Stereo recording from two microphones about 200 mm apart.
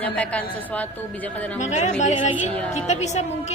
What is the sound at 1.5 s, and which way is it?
A woman's voice, 35° left (ahead or behind).